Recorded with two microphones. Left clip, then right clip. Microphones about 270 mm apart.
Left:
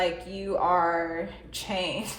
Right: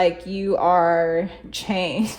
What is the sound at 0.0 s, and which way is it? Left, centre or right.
A woman's voice, right.